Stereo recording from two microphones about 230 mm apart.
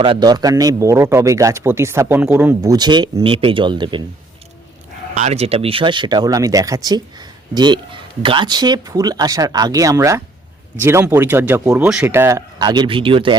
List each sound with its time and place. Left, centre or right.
0.0 s a man's voice: right
5.1 s a man's voice: right